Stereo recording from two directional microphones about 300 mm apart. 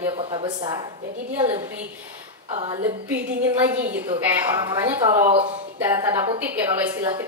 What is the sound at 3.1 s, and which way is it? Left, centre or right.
A woman's voice, centre.